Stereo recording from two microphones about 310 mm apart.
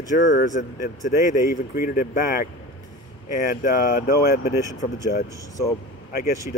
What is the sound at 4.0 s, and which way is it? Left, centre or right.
Speech, left.